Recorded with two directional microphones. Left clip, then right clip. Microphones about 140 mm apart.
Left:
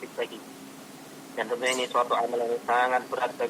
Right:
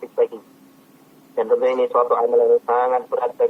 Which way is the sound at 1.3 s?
35° right (ahead or behind).